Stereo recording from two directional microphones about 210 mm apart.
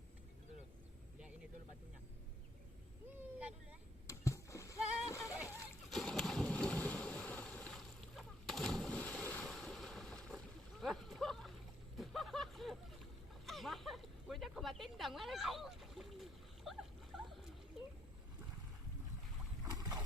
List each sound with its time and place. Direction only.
3.3 s vehicle: 5° right (ahead or behind)
4.0 s splash: 15° left (ahead or behind)
5.9 s boat: centre (ahead or behind)
11.9 s vehicle: centre (ahead or behind)
13.4 s speech: centre (ahead or behind)
17.8 s a sound: centre (ahead or behind)
19.7 s a sound: 15° right (ahead or behind)